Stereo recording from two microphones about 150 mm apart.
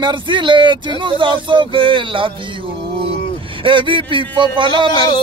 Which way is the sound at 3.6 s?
35° right (ahead or behind).